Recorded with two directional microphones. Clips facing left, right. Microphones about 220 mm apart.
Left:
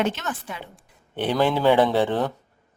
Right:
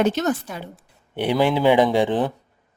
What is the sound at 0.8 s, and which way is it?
Speech, 10° right (ahead or behind).